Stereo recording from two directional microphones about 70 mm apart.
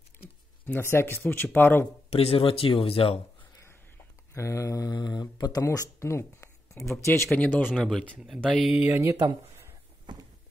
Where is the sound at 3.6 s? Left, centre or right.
Left.